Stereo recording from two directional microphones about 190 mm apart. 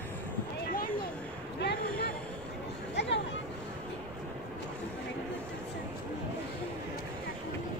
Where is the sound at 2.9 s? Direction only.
70° left (ahead or behind).